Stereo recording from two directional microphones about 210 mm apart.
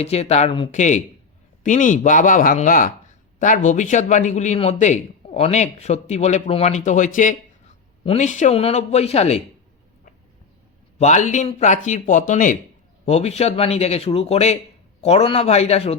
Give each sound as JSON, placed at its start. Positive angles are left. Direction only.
{"t": 0.0, "sound": "speech", "side_deg": 30}
{"t": 10.9, "sound": "speech", "side_deg": 35}